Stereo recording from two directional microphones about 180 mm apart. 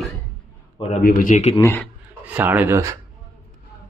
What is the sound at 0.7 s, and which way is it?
Speech, 35° left (ahead or behind).